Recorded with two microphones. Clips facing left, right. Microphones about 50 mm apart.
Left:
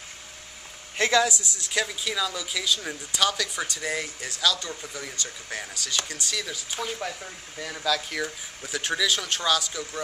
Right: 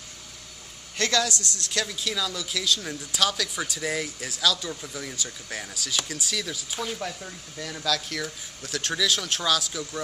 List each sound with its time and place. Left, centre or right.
0.9 s speech: centre
1.3 s speech: right
1.6 s speech: centre